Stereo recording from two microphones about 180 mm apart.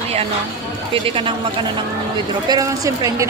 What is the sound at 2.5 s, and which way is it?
Speech, 20° right (ahead or behind).